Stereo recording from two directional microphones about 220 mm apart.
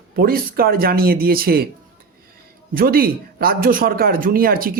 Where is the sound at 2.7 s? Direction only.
40° right (ahead or behind).